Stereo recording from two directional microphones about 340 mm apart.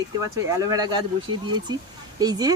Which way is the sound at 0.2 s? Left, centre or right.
Centre.